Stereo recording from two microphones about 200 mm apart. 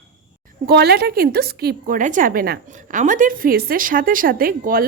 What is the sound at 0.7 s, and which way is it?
A woman's voice, 50° right (ahead or behind).